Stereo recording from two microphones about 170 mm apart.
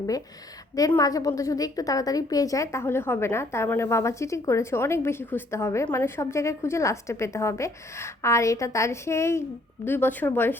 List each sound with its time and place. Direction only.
0.8 s a woman's voice: 20° left (ahead or behind)